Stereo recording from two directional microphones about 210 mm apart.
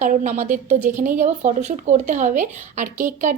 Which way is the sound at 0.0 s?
35° right (ahead or behind).